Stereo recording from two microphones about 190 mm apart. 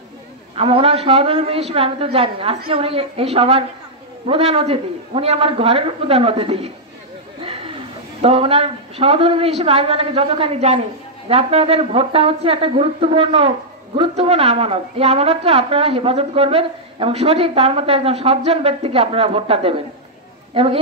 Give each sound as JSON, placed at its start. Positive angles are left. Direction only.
{"t": 0.6, "sound": "a woman's voice", "side_deg": -30}
{"t": 7.4, "sound": "a sound", "side_deg": -30}
{"t": 8.2, "sound": "a woman's voice", "side_deg": -30}